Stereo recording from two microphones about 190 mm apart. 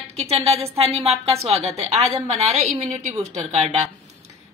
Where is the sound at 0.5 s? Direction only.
30° right (ahead or behind).